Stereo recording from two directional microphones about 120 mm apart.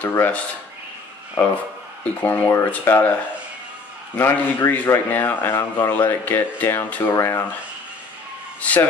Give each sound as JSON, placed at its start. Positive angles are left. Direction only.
{"t": 0.1, "sound": "speech", "side_deg": 15}
{"t": 2.2, "sound": "speech", "side_deg": 15}
{"t": 4.2, "sound": "speech", "side_deg": 20}
{"t": 8.5, "sound": "a man's voice", "side_deg": 10}